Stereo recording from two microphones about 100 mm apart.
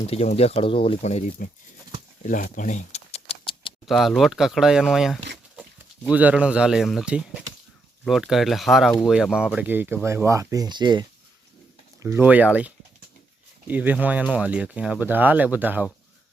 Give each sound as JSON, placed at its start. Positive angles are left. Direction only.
{"t": 0.1, "sound": "speech", "side_deg": 90}
{"t": 2.9, "sound": "a sound", "side_deg": 85}
{"t": 3.8, "sound": "speech", "side_deg": 0}
{"t": 9.6, "sound": "speech", "side_deg": -20}
{"t": 12.0, "sound": "speech", "side_deg": -20}